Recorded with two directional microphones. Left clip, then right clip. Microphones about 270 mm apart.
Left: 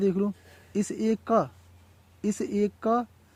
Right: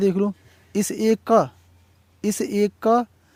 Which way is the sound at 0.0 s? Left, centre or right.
Right.